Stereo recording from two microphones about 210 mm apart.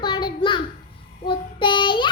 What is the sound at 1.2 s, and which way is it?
Child singing, 25° left (ahead or behind).